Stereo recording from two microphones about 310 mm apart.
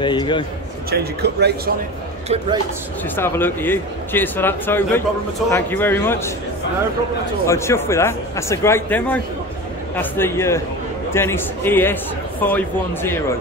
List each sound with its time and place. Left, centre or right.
0.0 s a man's voice: centre
0.8 s a man's voice: right
2.2 s speech: centre
3.2 s a man's voice: centre
7.4 s a man's voice: centre